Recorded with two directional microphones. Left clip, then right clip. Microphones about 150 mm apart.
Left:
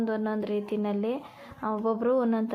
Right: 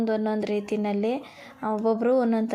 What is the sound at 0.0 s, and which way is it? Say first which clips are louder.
Speech: right 4 dB; 20° right (ahead or behind).